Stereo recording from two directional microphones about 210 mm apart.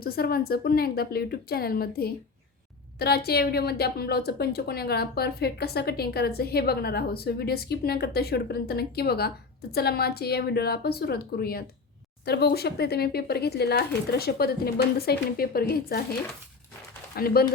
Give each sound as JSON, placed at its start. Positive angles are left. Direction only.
{"t": 0.0, "sound": "a woman's voice", "side_deg": 45}
{"t": 17.2, "sound": "a woman's voice", "side_deg": 45}